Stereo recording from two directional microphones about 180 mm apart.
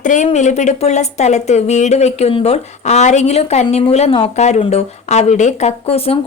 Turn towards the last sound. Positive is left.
turn(degrees=35)  # may be behind; listen again after turning